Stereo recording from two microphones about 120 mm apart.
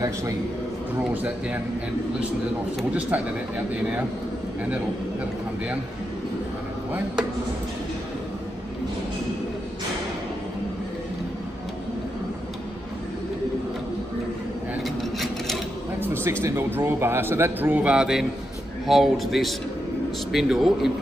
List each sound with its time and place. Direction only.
1.1 s a man's voice: 15° right (ahead or behind)
2.9 s a man's voice: 10° right (ahead or behind)
14.8 s filing: centre (ahead or behind)
16.4 s a man's voice: 20° right (ahead or behind); by 20.9 s 5° right (ahead or behind)